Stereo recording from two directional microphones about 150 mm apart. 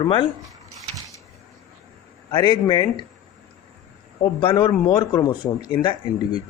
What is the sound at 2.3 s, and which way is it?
Speech, 30° left (ahead or behind).